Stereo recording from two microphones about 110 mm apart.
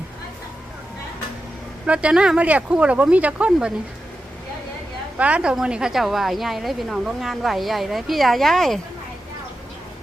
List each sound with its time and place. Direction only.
1.9 s speech: 10° right (ahead or behind)
5.1 s a woman's voice: 10° right (ahead or behind)